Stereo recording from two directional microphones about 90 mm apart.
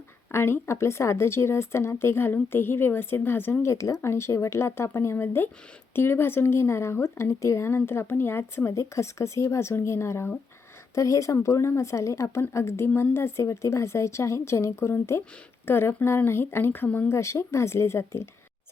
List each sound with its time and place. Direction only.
0.3 s speech: 25° left (ahead or behind)